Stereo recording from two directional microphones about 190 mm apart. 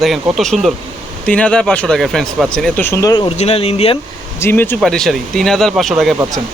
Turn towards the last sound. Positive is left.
turn(degrees=0)  # may be behind; listen again after turning